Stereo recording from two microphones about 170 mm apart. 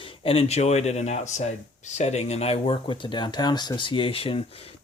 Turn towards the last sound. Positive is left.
turn(degrees=35)  # may be behind; listen again after turning